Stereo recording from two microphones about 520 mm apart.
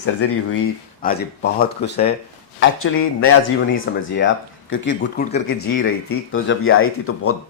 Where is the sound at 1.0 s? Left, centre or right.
Centre.